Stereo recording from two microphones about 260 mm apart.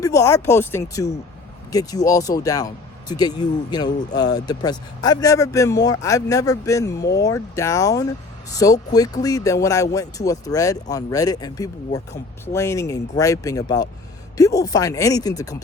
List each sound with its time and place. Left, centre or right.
0.0 s speech: centre